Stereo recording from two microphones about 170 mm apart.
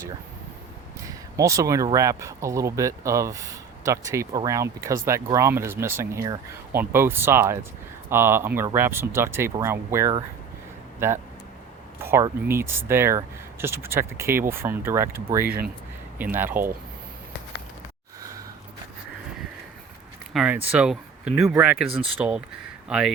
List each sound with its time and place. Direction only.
1.0 s speech: 20° right (ahead or behind)
11.9 s speech: 15° right (ahead or behind)
20.3 s speech: 5° right (ahead or behind)